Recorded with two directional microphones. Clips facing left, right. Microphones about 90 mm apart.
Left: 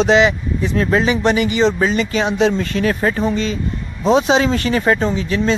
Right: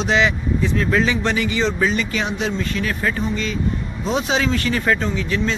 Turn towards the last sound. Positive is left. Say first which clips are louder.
# left 4 dB
turn(degrees=30)  # may be behind; listen again after turning